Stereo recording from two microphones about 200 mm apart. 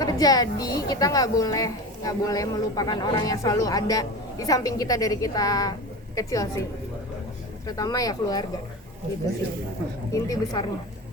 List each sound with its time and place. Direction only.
0.0 s a woman's voice: 20° left (ahead or behind)
7.7 s a woman's voice: 20° left (ahead or behind)
10.2 s a woman's voice: 20° left (ahead or behind)